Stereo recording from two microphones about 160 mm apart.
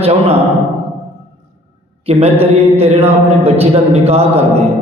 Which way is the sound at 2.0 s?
40° right (ahead or behind).